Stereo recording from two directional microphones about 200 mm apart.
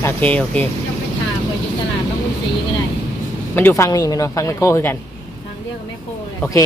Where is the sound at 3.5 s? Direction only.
10° left (ahead or behind).